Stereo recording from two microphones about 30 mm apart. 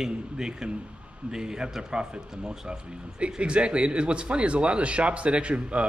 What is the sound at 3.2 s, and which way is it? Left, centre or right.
Speech, right.